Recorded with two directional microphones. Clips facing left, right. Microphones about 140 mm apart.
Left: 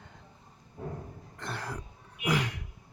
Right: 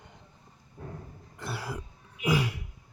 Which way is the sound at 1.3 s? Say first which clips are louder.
Right 2 dB; 5° right (ahead or behind).